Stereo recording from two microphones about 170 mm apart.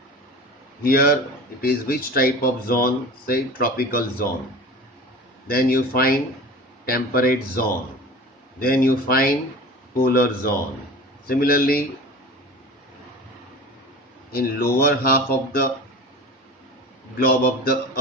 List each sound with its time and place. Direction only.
0.8 s speech: 60° left (ahead or behind)
5.5 s speech: 60° left (ahead or behind)
14.3 s speech: 60° left (ahead or behind)
17.2 s speech: 60° left (ahead or behind)